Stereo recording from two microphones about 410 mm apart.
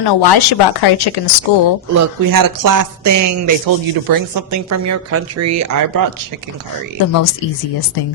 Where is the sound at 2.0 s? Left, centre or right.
Right.